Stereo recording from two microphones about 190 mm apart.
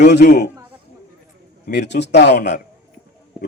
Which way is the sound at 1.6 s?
65° left (ahead or behind).